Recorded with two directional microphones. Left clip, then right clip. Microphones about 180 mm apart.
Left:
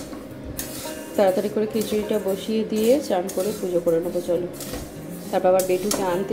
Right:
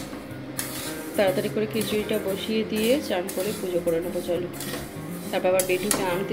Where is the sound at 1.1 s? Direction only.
20° left (ahead or behind).